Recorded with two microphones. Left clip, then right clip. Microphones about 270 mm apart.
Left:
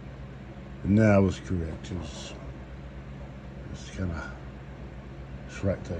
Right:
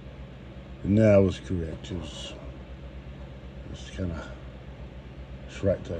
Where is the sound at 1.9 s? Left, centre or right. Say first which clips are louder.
Right 2 dB; centre.